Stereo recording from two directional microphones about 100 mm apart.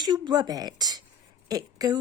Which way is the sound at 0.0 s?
45° right (ahead or behind).